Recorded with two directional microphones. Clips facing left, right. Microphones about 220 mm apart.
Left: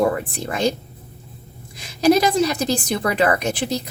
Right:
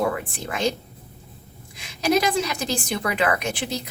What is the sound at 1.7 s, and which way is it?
A woman's voice, 35° left (ahead or behind).